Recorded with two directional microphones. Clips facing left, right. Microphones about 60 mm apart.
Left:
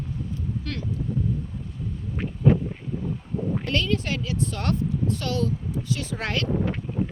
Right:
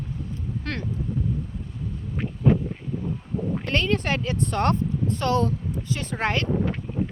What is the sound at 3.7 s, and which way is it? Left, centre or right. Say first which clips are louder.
Speech: right 3 dB; right.